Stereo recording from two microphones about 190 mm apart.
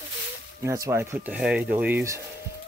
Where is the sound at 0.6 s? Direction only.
15° right (ahead or behind).